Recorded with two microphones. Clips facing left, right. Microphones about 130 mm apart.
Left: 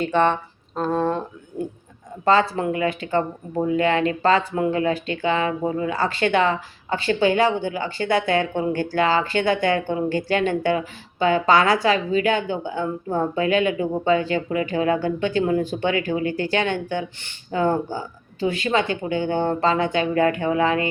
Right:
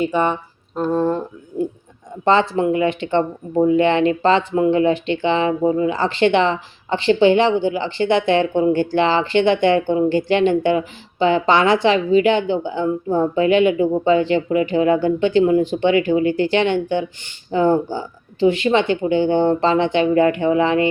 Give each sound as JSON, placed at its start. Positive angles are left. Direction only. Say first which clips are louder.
{"t": 0.0, "sound": "speech", "louder": "right 1 dB", "side_deg": -10}
{"t": 2.2, "sound": "speech", "louder": "right 3 dB", "side_deg": -25}